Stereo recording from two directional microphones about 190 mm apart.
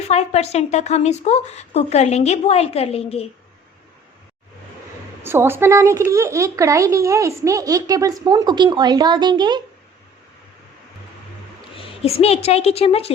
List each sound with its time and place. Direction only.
0.1 s a woman's voice: 35° left (ahead or behind)
5.2 s a child's voice: 10° right (ahead or behind)
11.8 s a woman's voice: 30° left (ahead or behind)